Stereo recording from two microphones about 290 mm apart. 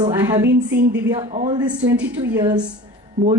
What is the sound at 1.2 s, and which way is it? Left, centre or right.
Speech, centre.